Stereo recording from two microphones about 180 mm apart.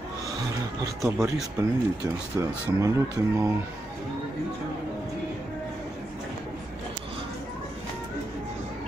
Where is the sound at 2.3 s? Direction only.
15° right (ahead or behind).